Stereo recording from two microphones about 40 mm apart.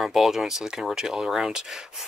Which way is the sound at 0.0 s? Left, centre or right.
Centre.